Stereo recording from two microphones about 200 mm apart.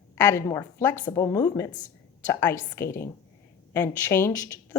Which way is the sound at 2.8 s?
15° left (ahead or behind).